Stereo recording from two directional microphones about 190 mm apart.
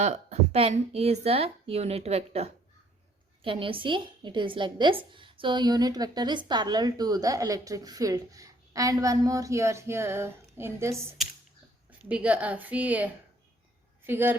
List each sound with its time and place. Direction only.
0.0 s a woman's voice: 35° right (ahead or behind); by 13.1 s 10° right (ahead or behind)
14.1 s a woman's voice: 10° right (ahead or behind)